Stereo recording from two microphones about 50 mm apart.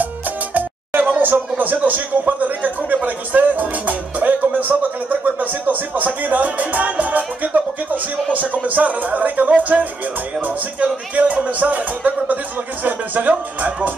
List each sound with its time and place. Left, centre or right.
0.6 s speech: right
5.2 s music: right
13.3 s speech: right